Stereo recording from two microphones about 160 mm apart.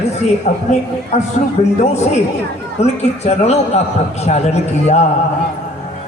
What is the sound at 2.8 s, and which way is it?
Music, 40° left (ahead or behind).